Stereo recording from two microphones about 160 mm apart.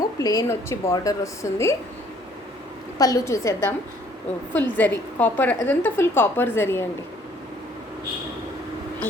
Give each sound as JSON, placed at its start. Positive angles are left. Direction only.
{"t": 0.2, "sound": "a woman's voice", "side_deg": 20}
{"t": 3.0, "sound": "a woman's voice", "side_deg": 20}